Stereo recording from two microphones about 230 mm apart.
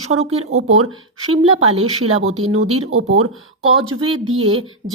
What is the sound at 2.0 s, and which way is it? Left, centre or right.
Speech, right.